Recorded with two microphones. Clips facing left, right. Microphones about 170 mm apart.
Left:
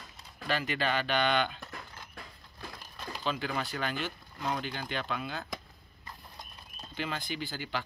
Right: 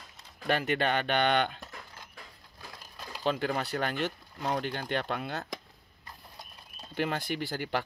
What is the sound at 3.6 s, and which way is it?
Speech, 60° right (ahead or behind).